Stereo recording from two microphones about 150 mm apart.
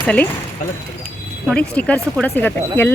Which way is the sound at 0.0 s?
10° left (ahead or behind).